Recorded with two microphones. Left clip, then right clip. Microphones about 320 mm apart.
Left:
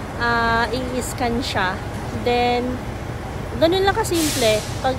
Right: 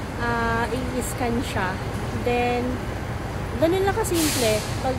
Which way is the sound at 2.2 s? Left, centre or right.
Centre.